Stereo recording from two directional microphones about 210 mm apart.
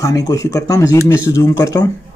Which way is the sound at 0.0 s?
15° left (ahead or behind).